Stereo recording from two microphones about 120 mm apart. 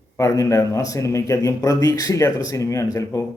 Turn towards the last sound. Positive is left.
turn(degrees=25)  # may be behind; listen again after turning